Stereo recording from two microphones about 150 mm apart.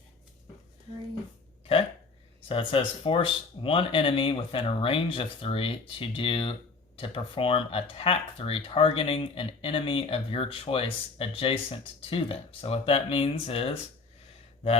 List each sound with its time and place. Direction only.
2.5 s speech: 35° left (ahead or behind)